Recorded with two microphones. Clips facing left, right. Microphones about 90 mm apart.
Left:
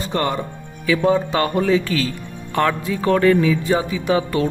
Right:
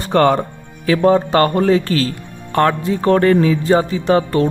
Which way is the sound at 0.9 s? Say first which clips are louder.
Right 4 dB; 45° right (ahead or behind).